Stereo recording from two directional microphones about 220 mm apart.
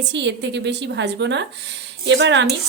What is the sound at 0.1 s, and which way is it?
A woman's voice, 50° right (ahead or behind).